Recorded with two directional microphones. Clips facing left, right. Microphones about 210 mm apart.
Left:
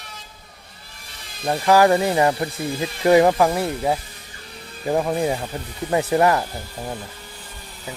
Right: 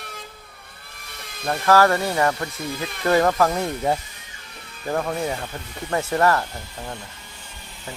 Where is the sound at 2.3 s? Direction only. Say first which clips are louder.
Left 4 dB; 30° left (ahead or behind).